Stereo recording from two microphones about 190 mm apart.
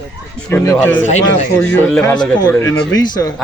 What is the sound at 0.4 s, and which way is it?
Speech, 10° left (ahead or behind).